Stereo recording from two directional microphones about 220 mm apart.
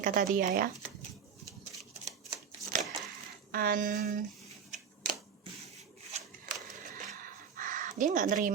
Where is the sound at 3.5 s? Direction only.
40° right (ahead or behind).